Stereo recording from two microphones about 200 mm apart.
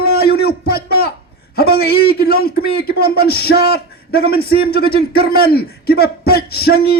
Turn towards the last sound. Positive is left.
turn(degrees=50)  # may be behind; listen again after turning